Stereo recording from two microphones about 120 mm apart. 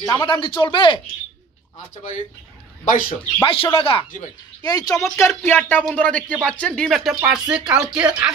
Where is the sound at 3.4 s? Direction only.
50° left (ahead or behind).